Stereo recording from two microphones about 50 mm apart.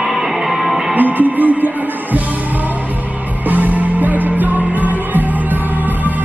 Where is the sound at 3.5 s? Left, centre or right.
Right.